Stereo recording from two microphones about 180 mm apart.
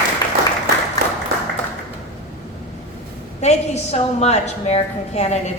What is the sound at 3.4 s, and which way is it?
A woman's voice, 35° left (ahead or behind).